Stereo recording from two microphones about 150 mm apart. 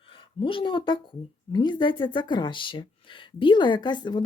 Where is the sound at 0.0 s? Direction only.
35° left (ahead or behind).